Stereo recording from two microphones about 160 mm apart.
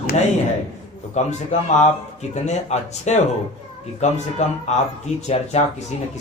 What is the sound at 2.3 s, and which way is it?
Speech, 45° left (ahead or behind).